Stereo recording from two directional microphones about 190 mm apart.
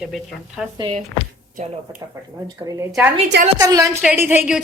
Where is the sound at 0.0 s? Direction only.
Centre (ahead or behind).